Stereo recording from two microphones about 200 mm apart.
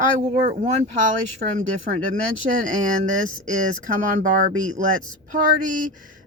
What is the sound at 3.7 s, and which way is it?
Speech, 40° right (ahead or behind).